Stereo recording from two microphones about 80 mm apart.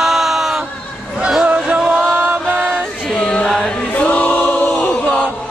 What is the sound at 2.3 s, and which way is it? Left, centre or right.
Music, right.